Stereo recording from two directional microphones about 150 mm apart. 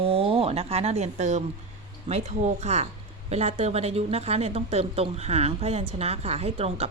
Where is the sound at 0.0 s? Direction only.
40° right (ahead or behind).